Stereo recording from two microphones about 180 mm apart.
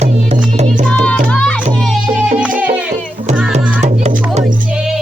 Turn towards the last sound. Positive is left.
turn(degrees=-40)  # may be behind; listen again after turning